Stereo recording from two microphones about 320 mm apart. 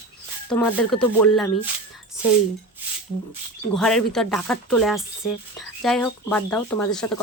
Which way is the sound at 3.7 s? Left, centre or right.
Centre.